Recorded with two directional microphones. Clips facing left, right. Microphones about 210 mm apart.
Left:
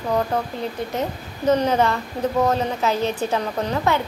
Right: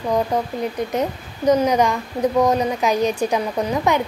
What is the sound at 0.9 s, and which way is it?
A woman's voice, 15° right (ahead or behind).